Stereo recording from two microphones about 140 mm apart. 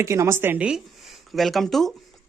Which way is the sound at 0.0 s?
20° right (ahead or behind).